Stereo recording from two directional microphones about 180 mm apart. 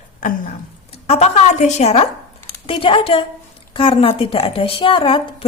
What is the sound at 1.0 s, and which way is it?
A woman's voice, 35° left (ahead or behind).